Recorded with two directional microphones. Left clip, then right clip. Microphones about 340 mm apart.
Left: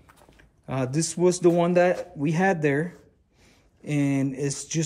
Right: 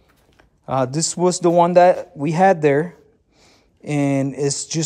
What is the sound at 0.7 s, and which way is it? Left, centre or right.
Speech, centre.